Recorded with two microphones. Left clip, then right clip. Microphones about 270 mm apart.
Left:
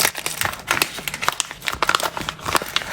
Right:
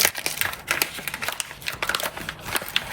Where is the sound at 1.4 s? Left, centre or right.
Centre.